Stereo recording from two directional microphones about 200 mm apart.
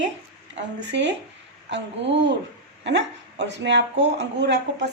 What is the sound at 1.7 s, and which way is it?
A woman's voice, 60° right (ahead or behind).